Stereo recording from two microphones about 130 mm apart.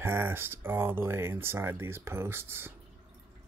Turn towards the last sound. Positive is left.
turn(degrees=-20)  # may be behind; listen again after turning